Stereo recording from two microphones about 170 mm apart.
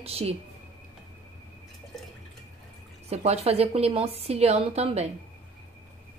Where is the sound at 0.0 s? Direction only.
35° right (ahead or behind).